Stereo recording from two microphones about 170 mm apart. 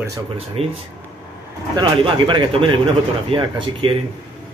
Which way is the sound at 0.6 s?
35° right (ahead or behind).